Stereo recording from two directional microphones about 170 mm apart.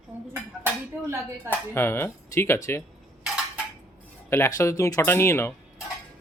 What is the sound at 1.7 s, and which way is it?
Speech, 15° left (ahead or behind).